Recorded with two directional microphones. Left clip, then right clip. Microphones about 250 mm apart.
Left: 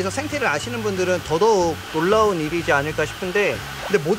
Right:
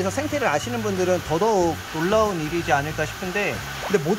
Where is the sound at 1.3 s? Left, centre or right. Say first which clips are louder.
Left 6 dB; centre.